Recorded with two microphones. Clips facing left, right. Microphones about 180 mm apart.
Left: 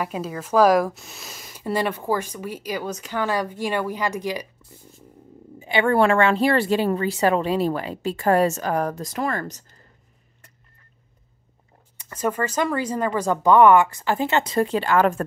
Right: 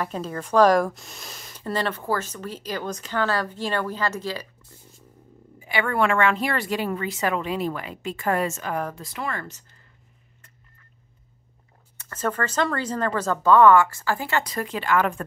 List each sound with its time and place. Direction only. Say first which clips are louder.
0.0 s speech: left 1 dB; 10° left (ahead or behind)
5.6 s a woman's voice: left 5 dB; 25° left (ahead or behind)
12.0 s speech: left 2 dB; 10° left (ahead or behind); by 15.2 s 40° left (ahead or behind)